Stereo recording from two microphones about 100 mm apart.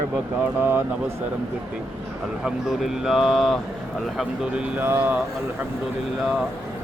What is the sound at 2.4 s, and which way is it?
Speech, centre (ahead or behind).